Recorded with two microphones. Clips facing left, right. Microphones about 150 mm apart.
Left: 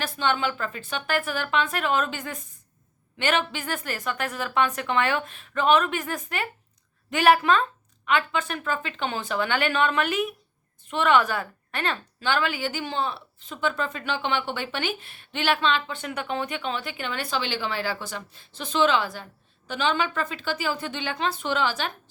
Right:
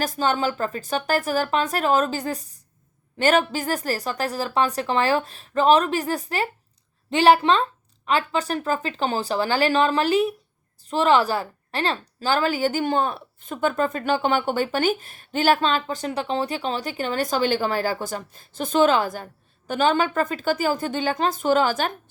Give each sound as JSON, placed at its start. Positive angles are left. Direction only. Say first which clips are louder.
{"t": 0.0, "sound": "a woman's voice", "louder": "right 3 dB", "side_deg": -40}